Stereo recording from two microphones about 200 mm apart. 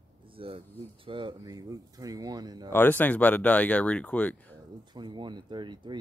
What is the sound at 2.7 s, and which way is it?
Speech, 10° left (ahead or behind).